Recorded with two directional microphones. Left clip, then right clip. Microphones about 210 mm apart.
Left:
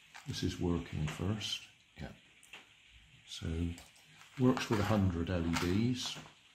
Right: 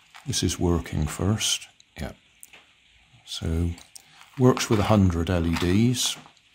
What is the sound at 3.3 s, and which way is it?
Speech, 40° right (ahead or behind).